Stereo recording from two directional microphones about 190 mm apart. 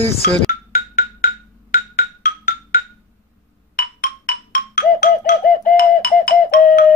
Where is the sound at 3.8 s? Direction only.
50° left (ahead or behind).